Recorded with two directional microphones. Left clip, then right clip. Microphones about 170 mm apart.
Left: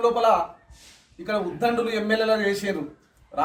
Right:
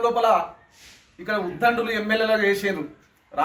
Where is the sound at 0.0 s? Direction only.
20° left (ahead or behind).